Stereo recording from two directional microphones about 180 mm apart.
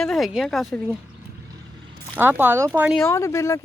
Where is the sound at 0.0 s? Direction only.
Centre (ahead or behind).